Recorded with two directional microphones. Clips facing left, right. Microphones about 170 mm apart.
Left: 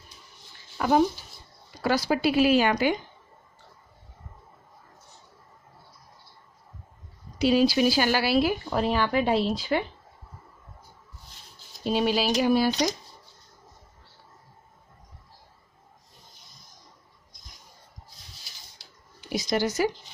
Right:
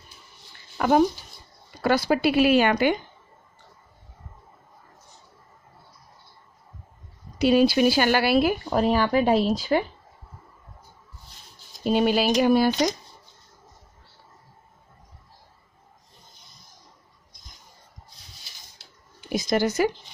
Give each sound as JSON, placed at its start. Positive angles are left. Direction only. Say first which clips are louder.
{"t": 0.7, "sound": "speech", "louder": "right 2 dB", "side_deg": -60}
{"t": 7.3, "sound": "speech", "louder": "right 3 dB", "side_deg": -55}
{"t": 11.8, "sound": "speech", "louder": "right 3 dB", "side_deg": -50}
{"t": 19.2, "sound": "speech", "louder": "right 3 dB", "side_deg": -50}